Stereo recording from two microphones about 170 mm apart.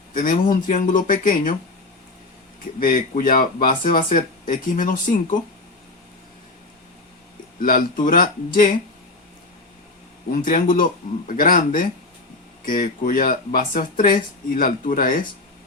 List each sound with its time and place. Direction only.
0.1 s speech: 50° left (ahead or behind)
2.8 s speech: 55° left (ahead or behind)
7.6 s speech: 50° left (ahead or behind)
10.3 s speech: 50° left (ahead or behind)